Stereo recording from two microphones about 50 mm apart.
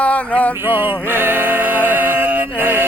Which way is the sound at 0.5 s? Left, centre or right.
Right.